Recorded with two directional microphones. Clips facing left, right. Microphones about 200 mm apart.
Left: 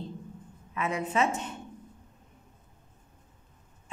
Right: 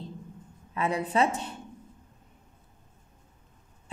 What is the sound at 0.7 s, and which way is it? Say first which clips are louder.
Speech: right 2 dB; 35° right (ahead or behind).